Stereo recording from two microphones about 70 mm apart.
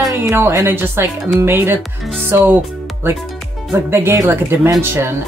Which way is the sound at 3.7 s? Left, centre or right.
Right.